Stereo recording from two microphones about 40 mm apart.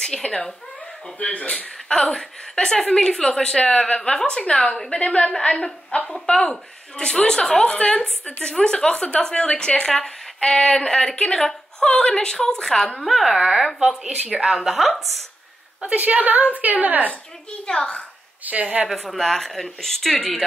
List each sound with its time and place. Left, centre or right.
0.0 s speech: centre
1.2 s speech: left
2.0 s a woman's voice: centre
6.1 s a woman's voice: centre
7.7 s speech: left
9.8 s a woman's voice: centre
13.0 s speech: centre
14.1 s a woman's voice: right
14.4 s speech: centre
15.9 s a woman's voice: right
17.6 s speech: left
18.4 s a woman's voice: right
18.9 s a woman's voice: centre